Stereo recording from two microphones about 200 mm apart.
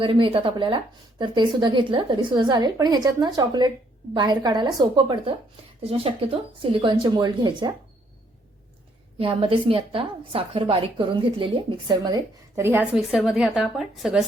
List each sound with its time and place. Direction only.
0.0 s a woman's voice: 25° right (ahead or behind)
9.1 s a woman's voice: 25° right (ahead or behind); by 14.3 s centre (ahead or behind)